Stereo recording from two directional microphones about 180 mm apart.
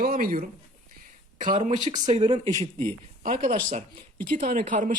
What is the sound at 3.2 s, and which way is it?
Speech, 50° right (ahead or behind).